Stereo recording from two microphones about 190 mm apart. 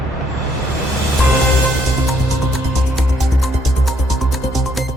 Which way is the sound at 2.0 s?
Centre (ahead or behind).